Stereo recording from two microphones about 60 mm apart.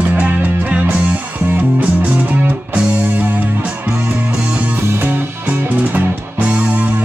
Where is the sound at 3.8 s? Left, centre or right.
Right.